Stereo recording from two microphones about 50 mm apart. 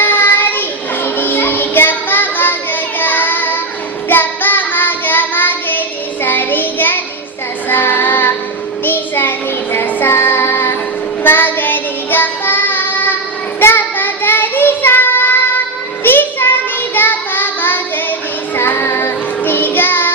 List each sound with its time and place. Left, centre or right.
0.0 s child singing: left
1.0 s music: left
4.1 s child singing: left
9.7 s music: left
10.2 s child singing: left
11.2 s child singing: left